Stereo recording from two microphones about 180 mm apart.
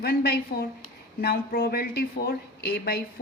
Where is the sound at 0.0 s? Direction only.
60° left (ahead or behind).